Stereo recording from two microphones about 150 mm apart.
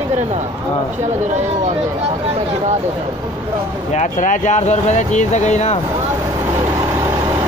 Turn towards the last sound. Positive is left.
turn(degrees=50)  # may be behind; listen again after turning